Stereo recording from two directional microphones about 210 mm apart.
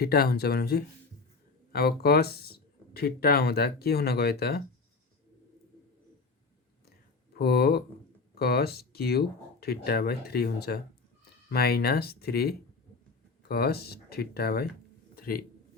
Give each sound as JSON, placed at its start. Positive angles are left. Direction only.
{"t": 0.0, "sound": "speech", "side_deg": 50}
{"t": 7.3, "sound": "speech", "side_deg": 50}
{"t": 15.1, "sound": "a sound", "side_deg": 45}